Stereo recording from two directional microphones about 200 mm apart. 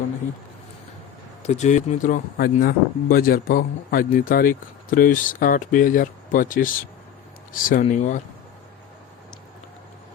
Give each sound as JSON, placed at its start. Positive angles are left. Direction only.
{"t": 1.4, "sound": "speech", "side_deg": 35}